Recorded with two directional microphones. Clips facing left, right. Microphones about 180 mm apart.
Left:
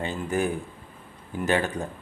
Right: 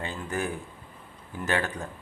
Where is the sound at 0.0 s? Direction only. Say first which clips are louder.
Left 5 dB; 20° left (ahead or behind).